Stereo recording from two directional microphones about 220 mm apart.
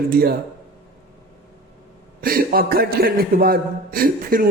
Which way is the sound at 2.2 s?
45° right (ahead or behind).